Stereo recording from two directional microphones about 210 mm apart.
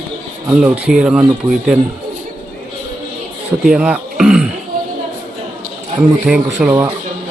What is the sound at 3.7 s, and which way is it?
Throat clearing, 5° right (ahead or behind).